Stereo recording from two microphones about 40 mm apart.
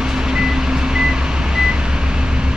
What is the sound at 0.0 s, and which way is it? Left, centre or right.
Vehicle, centre.